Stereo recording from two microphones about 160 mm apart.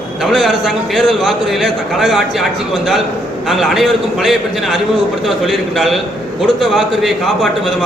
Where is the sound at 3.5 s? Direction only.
Centre (ahead or behind).